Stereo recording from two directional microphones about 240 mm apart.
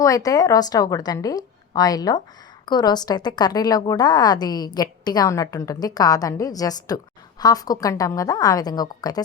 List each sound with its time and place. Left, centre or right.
0.0 s a woman's voice: centre